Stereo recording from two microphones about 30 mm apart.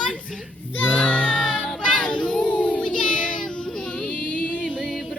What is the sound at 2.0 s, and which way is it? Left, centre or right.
Children playing, left.